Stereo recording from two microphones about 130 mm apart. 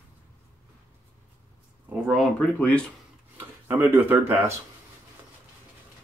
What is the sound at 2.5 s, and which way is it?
Speech, 10° left (ahead or behind).